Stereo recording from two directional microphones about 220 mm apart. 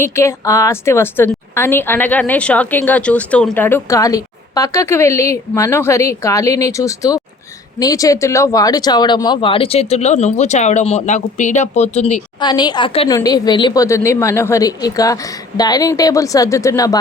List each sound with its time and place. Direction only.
0.0 s a woman's voice: 10° left (ahead or behind)